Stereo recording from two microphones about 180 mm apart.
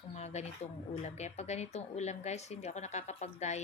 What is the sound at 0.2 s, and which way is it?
Speech, 40° left (ahead or behind).